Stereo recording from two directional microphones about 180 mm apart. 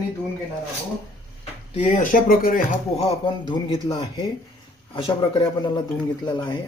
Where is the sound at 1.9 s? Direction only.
45° left (ahead or behind).